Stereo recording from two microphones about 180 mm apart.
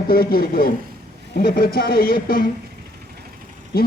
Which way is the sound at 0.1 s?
55° left (ahead or behind).